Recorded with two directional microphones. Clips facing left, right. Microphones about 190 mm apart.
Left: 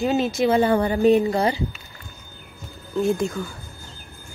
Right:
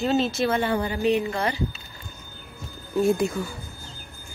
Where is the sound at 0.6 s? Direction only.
45° left (ahead or behind).